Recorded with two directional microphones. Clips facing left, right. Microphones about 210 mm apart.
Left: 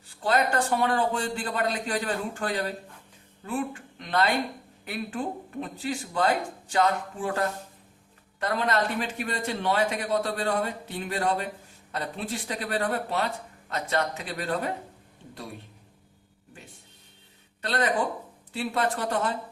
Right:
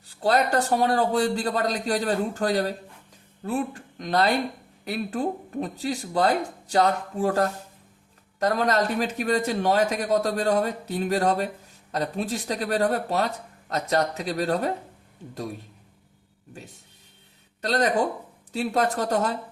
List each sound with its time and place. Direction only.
0.2 s a man's voice: 40° right (ahead or behind)
17.6 s a man's voice: 40° right (ahead or behind)